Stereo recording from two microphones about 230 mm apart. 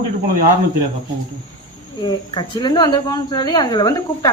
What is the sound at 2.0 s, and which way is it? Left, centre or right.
Speech, centre.